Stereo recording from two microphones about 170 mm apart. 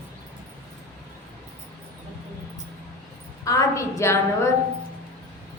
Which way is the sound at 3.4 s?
20° left (ahead or behind).